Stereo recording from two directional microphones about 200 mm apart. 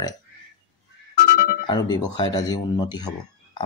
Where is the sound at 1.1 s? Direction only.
50° left (ahead or behind).